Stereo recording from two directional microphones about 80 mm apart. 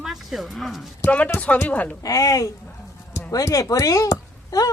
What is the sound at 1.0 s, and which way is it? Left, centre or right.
Speech, centre.